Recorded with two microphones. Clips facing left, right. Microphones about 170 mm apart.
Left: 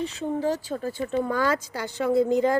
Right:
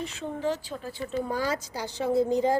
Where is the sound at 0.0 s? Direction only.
35° left (ahead or behind).